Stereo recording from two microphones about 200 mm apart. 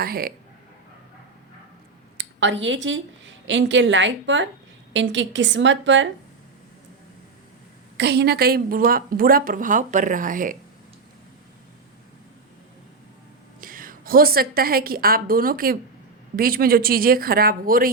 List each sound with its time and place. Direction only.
0.0 s a woman's voice: 50° right (ahead or behind)
2.1 s a woman's voice: 65° right (ahead or behind)
7.9 s a woman's voice: 55° right (ahead or behind)
13.6 s a woman's voice: 45° right (ahead or behind)